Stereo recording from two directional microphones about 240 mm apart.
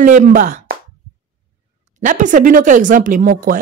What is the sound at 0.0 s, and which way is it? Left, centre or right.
Speech, right.